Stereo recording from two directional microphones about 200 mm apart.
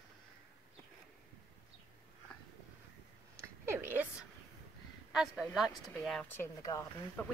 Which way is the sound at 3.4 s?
10° right (ahead or behind).